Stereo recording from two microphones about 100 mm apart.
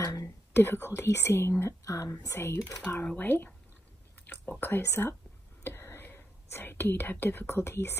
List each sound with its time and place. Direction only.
0.0 s whispering: 35° left (ahead or behind)
0.6 s speech: 25° left (ahead or behind)